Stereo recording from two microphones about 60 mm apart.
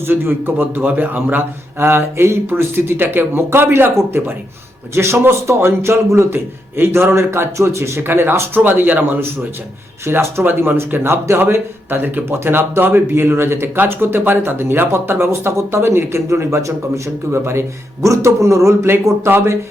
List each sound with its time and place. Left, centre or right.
0.1 s a man's voice: right
4.9 s a man's voice: right